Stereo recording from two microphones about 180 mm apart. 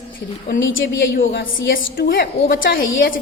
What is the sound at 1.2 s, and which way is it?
Speech, 80° left.